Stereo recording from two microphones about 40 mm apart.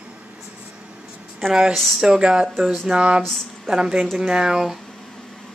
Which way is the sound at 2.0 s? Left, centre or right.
Centre.